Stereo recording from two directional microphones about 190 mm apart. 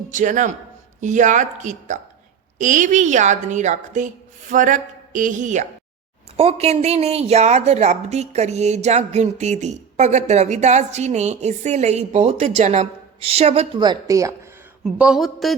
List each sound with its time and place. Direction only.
0.1 s speech: 40° right (ahead or behind); by 14.3 s 15° right (ahead or behind)
14.8 s a man's voice: 5° right (ahead or behind)